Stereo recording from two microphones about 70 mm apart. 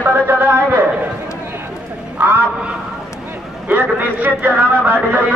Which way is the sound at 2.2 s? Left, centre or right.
Right.